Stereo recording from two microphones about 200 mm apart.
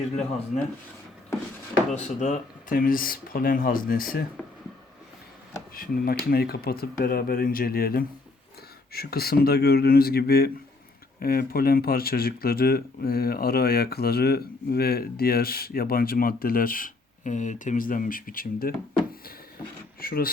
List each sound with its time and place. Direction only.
0.5 s speech: 40° left (ahead or behind)
2.0 s speech: 35° left (ahead or behind)
5.7 s speech: 45° left (ahead or behind)
20.0 s speech: 45° left (ahead or behind)